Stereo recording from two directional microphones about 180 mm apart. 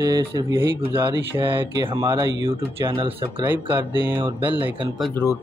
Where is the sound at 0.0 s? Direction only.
20° right (ahead or behind).